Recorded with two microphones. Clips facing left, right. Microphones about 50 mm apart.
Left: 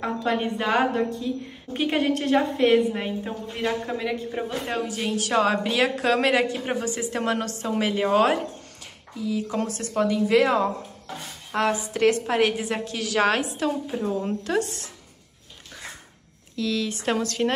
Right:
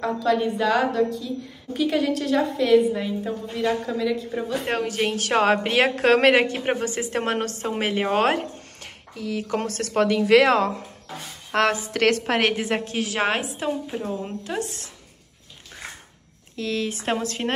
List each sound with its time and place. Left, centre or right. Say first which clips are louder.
0.0 s a woman's voice: right 3 dB; left
4.6 s a woman's voice: right 3 dB; right
9.1 s speech: even; right
9.7 s a woman's voice: right 5 dB; right
11.5 s a woman's voice: right 2 dB; right; by 14.6 s centre
16.5 s a woman's voice: even; right
17.0 s speech: left 1 dB; right